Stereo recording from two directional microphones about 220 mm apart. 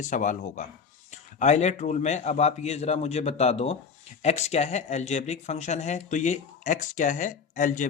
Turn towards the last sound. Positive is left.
turn(degrees=35)  # may be behind; listen again after turning